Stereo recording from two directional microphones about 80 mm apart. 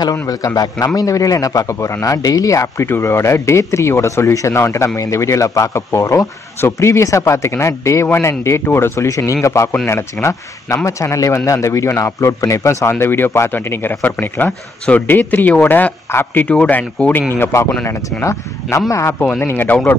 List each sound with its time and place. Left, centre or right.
0.6 s a man's voice: left; by 17.2 s centre
17.3 s speech: left
19.1 s a man's voice: centre